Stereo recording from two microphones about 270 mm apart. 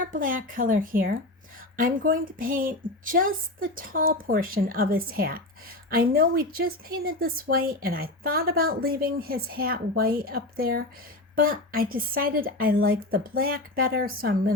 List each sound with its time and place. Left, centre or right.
0.0 s a woman's voice: right